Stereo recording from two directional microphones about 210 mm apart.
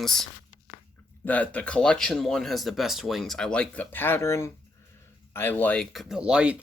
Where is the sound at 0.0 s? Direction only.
Centre (ahead or behind).